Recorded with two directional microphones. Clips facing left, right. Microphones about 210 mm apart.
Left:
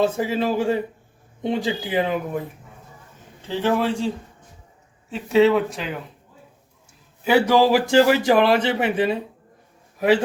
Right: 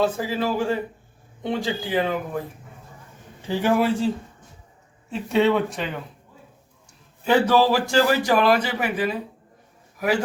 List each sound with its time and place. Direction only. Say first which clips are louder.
0.0 s a man's voice: left 2 dB; 20° left (ahead or behind)
3.4 s a man's voice: right 1 dB; 10° right (ahead or behind)
5.1 s speech: left 3 dB; centre (ahead or behind)
7.3 s a man's voice: left 2 dB; 10° left (ahead or behind)